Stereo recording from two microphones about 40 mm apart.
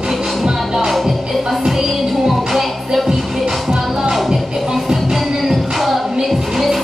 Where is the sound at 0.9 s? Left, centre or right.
Centre.